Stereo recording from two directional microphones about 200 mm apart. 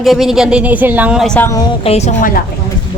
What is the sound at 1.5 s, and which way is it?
Speech, 20° left (ahead or behind).